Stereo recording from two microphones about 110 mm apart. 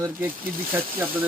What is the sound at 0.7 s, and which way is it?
Speech, 15° right (ahead or behind).